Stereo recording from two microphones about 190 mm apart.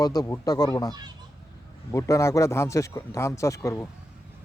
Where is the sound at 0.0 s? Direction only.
20° left (ahead or behind).